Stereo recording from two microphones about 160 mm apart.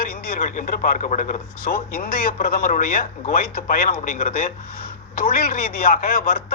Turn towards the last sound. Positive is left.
turn(degrees=65)  # may be behind; listen again after turning